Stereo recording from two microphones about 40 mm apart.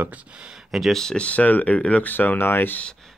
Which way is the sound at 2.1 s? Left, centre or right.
Left.